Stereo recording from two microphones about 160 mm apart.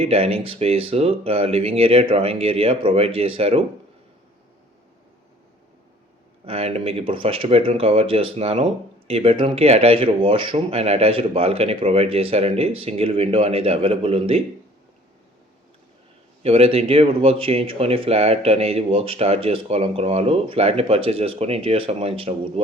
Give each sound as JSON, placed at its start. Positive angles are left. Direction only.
{"t": 0.0, "sound": "speech", "side_deg": -35}
{"t": 6.4, "sound": "speech", "side_deg": -40}
{"t": 16.4, "sound": "speech", "side_deg": -40}